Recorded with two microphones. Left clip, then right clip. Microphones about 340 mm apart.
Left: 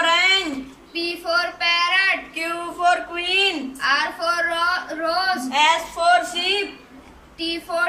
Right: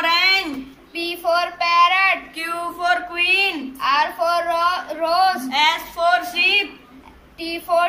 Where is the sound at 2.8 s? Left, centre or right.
Centre.